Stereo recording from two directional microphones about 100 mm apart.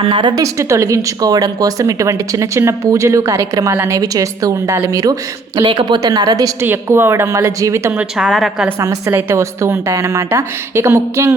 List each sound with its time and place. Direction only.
0.1 s a woman's voice: 55° right (ahead or behind)
0.3 s speech: 30° right (ahead or behind)
5.6 s a woman's voice: 45° right (ahead or behind)
6.6 s a woman's voice: 25° right (ahead or behind)
8.1 s a woman's voice: centre (ahead or behind)
8.8 s a woman's voice: 30° right (ahead or behind)